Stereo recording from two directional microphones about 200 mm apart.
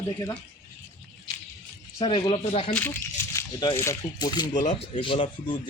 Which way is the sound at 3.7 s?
15° left (ahead or behind).